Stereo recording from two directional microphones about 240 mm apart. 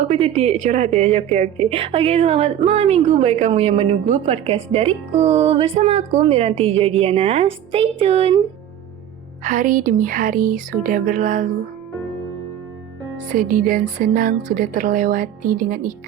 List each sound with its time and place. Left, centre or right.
0.0 s a woman's voice: right
9.4 s speech: right
13.3 s speech: right